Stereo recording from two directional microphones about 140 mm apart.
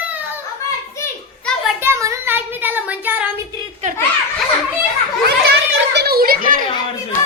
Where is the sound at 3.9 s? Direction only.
70° right (ahead or behind).